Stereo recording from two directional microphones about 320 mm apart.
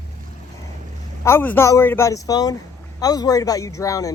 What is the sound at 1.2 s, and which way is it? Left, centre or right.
A man's voice, centre.